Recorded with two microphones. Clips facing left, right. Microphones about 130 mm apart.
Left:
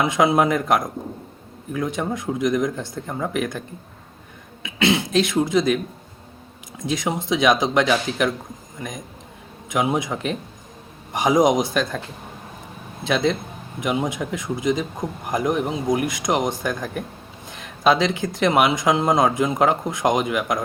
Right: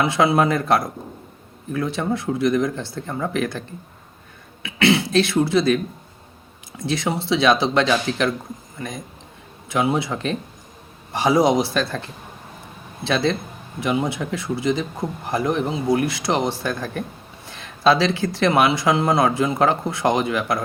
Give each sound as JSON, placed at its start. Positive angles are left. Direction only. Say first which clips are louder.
{"t": 0.0, "sound": "speech", "louder": "even", "side_deg": 15}
{"t": 4.6, "sound": "speech", "louder": "right 2 dB", "side_deg": 15}
{"t": 13.1, "sound": "speech", "louder": "even", "side_deg": 15}